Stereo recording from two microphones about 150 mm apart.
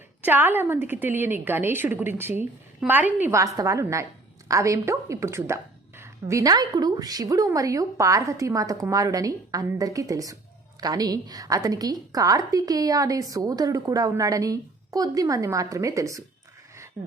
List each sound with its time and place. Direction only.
0.2 s a woman's voice: 15° right (ahead or behind)